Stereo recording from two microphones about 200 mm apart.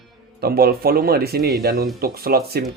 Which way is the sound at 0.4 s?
50° right (ahead or behind).